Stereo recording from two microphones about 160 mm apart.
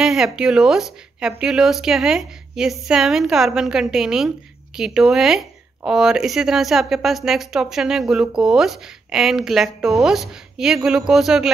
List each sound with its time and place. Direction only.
0.0 s speech: 5° right (ahead or behind)